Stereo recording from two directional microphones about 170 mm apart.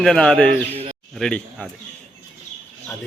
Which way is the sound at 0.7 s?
35° right (ahead or behind).